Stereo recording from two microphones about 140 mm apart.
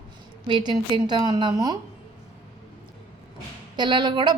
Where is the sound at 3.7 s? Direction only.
30° right (ahead or behind).